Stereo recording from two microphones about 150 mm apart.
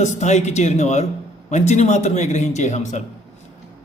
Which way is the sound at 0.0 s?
50° left (ahead or behind).